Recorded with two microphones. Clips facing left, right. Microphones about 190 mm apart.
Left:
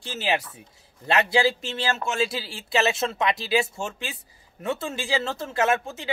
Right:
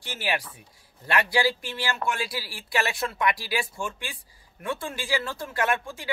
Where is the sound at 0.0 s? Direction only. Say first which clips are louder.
Left 3 dB; 25° left (ahead or behind).